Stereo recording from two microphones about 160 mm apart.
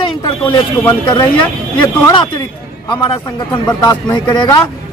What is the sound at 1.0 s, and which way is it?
Speech, 30° left (ahead or behind).